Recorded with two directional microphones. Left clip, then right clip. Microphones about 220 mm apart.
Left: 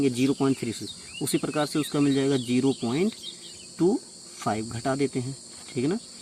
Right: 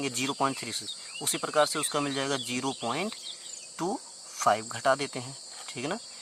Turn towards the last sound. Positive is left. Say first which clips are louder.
# left 5 dB
turn(degrees=-25)  # may be behind; listen again after turning